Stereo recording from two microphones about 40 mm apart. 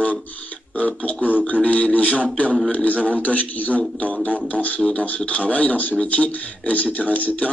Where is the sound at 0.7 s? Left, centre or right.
Left.